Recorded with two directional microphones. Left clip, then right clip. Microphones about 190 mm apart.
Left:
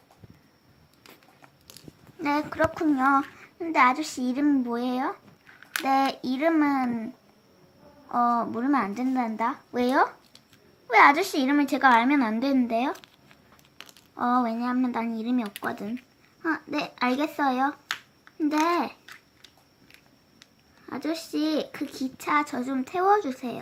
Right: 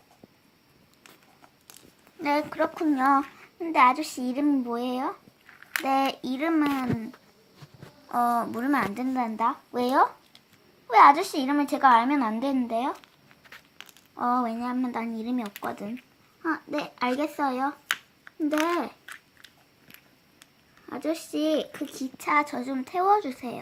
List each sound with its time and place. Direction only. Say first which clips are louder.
2.1 s a child's voice: even; 5° right (ahead or behind)
8.1 s a child's voice: left 1 dB; centre (ahead or behind)
19.0 s a sound: right 3 dB; 30° right (ahead or behind)
20.8 s a child's voice: right 1 dB; 5° left (ahead or behind)